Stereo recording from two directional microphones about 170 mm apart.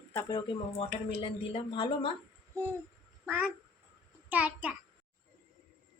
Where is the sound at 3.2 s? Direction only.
10° right (ahead or behind).